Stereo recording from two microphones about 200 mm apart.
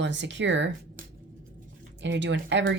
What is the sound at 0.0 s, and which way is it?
Speech, 65° right (ahead or behind).